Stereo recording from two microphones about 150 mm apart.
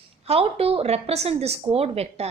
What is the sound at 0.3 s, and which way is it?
A woman's voice, 40° right (ahead or behind).